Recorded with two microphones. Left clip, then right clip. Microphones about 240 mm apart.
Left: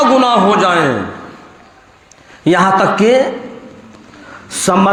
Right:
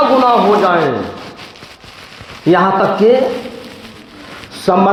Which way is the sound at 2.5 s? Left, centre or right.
Left.